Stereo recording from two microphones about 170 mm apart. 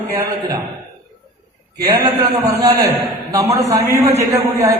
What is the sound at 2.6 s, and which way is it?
A man's voice, 20° right (ahead or behind).